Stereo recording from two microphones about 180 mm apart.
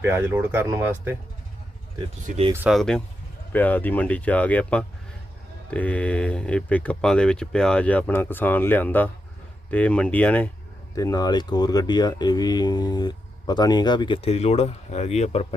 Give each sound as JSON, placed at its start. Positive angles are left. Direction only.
{"t": 0.0, "sound": "speech", "side_deg": -15}
{"t": 2.2, "sound": "speech", "side_deg": -40}
{"t": 2.6, "sound": "speech", "side_deg": 0}
{"t": 10.9, "sound": "speech", "side_deg": 20}